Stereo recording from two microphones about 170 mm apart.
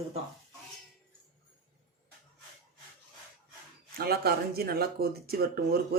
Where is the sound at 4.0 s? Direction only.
65° right (ahead or behind).